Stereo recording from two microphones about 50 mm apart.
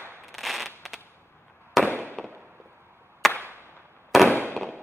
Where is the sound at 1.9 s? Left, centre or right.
Left.